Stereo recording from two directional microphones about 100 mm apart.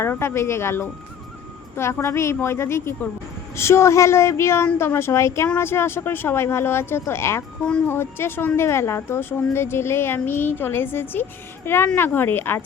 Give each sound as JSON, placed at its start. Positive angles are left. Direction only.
{"t": 0.0, "sound": "a woman's voice", "side_deg": 25}
{"t": 7.6, "sound": "speech", "side_deg": 10}
{"t": 7.9, "sound": "a woman's voice", "side_deg": 25}